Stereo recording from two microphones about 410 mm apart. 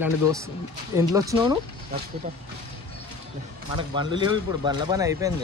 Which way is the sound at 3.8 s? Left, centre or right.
Centre.